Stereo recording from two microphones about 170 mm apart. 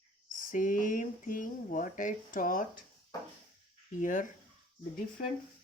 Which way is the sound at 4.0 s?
50° left (ahead or behind).